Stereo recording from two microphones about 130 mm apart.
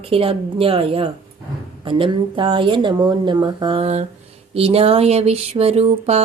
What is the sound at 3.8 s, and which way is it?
Speech, 55° right (ahead or behind).